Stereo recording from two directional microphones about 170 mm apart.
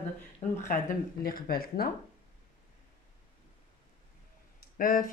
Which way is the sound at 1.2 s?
60° left (ahead or behind).